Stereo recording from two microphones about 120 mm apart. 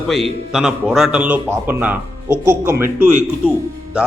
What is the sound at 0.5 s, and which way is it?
A man's voice, 5° right (ahead or behind).